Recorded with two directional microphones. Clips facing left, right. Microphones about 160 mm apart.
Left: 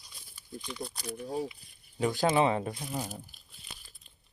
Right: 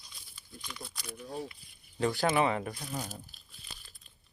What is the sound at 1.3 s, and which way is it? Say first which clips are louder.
Speech: left 4 dB; 10° left (ahead or behind).